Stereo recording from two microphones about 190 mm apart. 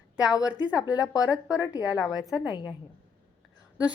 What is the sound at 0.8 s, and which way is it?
Speech, 20° left (ahead or behind).